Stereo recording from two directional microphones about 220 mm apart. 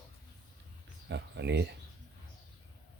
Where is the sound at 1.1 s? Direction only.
50° right (ahead or behind).